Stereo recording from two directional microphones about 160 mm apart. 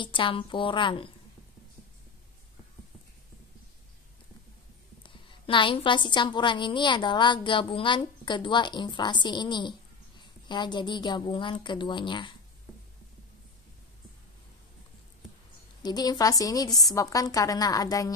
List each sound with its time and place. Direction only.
0.0 s a woman's voice: 30° left (ahead or behind)
5.0 s a woman's voice: 30° left (ahead or behind)
15.8 s a woman's voice: 25° left (ahead or behind)